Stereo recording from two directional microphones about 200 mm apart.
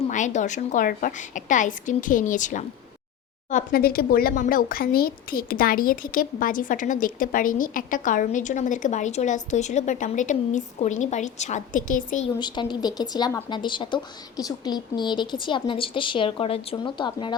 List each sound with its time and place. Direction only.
0.0 s a woman's voice: 35° left (ahead or behind)
12.4 s speech: 20° left (ahead or behind)